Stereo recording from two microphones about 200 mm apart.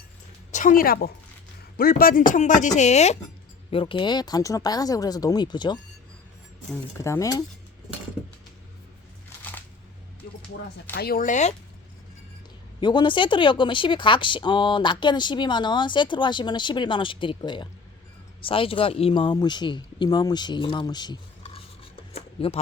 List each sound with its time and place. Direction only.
0.5 s a woman's voice: 40° left (ahead or behind); by 5.8 s 20° left (ahead or behind)
7.0 s speech: 15° left (ahead or behind)
10.9 s speech: 50° left (ahead or behind)
12.8 s speech: 25° left (ahead or behind)